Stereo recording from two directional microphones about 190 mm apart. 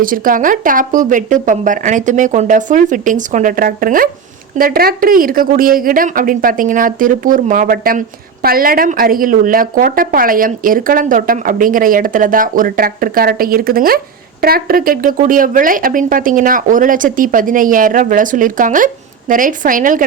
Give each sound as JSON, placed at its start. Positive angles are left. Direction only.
{"t": 0.0, "sound": "a woman's voice", "side_deg": -45}